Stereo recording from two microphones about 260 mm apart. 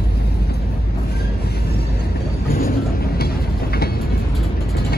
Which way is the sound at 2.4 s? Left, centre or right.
Left.